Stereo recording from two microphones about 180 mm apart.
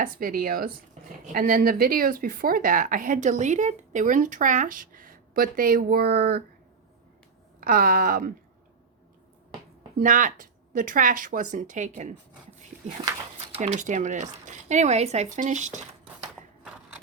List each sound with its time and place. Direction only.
0.0 s speech: 50° right (ahead or behind)
7.6 s speech: 50° right (ahead or behind)
10.0 s speech: 45° right (ahead or behind)
13.6 s speech: 45° right (ahead or behind)